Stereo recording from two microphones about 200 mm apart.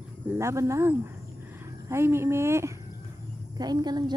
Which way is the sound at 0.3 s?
15° right (ahead or behind).